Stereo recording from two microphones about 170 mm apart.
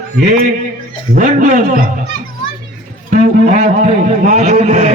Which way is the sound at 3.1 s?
45° right (ahead or behind).